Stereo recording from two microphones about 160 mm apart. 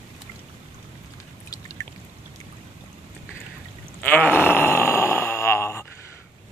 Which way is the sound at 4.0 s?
10° left (ahead or behind).